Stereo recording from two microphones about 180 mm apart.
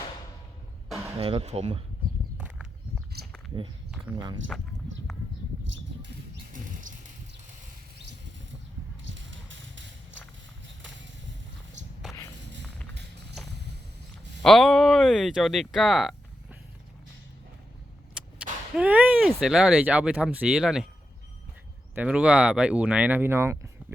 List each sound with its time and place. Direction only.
1.2 s speech: 30° right (ahead or behind)
4.1 s speech: 25° right (ahead or behind)
5.6 s a sound: 90° right
6.5 s music: 45° right (ahead or behind)
9.0 s walk: 90° right
14.4 s speech: centre (ahead or behind)
18.2 s whip: 5° right (ahead or behind)
18.8 s speech: 10° right (ahead or behind)
21.9 s speech: 5° right (ahead or behind)